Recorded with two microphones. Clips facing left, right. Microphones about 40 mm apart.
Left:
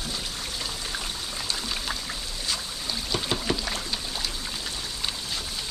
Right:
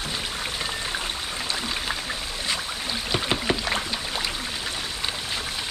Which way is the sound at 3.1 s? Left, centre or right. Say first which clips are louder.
Right 3 dB; right.